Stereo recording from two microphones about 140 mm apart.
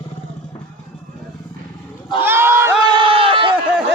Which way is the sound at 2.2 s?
15° right (ahead or behind).